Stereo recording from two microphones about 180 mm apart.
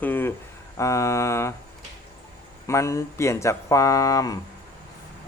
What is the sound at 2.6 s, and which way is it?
Speech, 15° left (ahead or behind).